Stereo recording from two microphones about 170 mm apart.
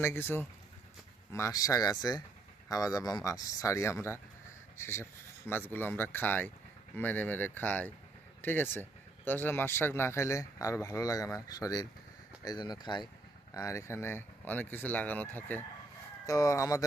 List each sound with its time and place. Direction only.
0.0 s speech: 15° left (ahead or behind)